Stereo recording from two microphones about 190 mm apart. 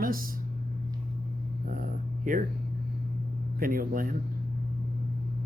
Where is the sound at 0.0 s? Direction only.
50° right (ahead or behind).